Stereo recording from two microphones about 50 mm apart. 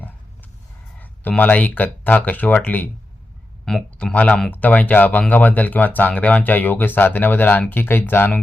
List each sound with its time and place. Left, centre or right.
1.4 s speech: left
3.9 s speech: left